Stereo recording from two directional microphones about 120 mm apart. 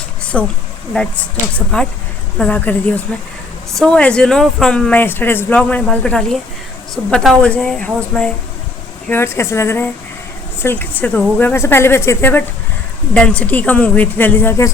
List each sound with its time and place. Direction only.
0.3 s speech: 5° left (ahead or behind)
9.0 s speech: 20° left (ahead or behind)